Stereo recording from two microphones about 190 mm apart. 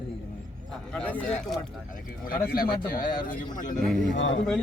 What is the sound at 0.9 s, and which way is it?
Speech, 10° left (ahead or behind).